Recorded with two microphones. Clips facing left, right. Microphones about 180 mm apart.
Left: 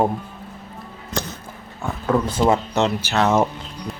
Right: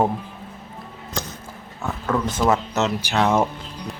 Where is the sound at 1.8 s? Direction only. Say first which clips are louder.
Left 3 dB; 15° left (ahead or behind).